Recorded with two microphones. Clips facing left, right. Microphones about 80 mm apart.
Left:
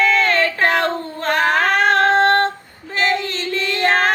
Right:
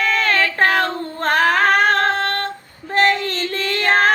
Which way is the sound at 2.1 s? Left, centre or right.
Left.